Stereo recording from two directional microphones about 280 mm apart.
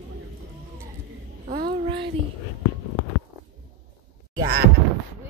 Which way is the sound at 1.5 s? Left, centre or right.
Right.